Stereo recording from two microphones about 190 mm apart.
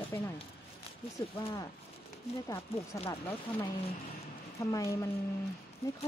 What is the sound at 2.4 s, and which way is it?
Speech, 15° left (ahead or behind).